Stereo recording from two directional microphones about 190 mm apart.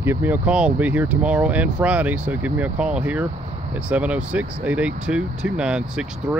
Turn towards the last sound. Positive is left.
turn(degrees=-5)  # may be behind; listen again after turning